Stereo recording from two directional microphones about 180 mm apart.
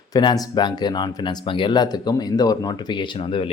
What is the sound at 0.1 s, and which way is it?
Speech, 20° left (ahead or behind).